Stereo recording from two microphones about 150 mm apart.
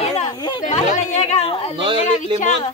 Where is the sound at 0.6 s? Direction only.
50° left (ahead or behind).